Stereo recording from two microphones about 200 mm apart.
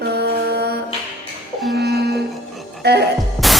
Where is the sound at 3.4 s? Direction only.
Centre (ahead or behind).